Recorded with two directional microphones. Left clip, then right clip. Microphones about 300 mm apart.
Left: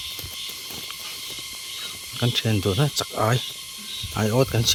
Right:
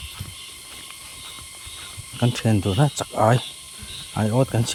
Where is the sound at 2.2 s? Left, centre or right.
Centre.